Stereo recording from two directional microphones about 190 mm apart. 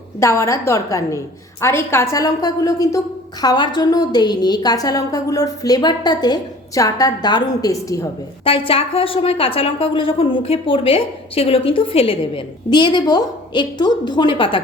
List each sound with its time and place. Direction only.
0.2 s a woman's voice: 15° left (ahead or behind)
8.4 s a woman's voice: 30° left (ahead or behind)